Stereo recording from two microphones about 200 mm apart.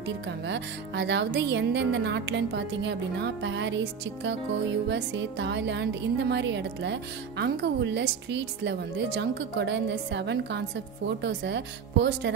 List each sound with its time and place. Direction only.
0.5 s speech: 60° right (ahead or behind)